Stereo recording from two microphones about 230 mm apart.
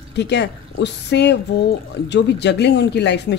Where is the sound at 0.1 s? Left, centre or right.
Left.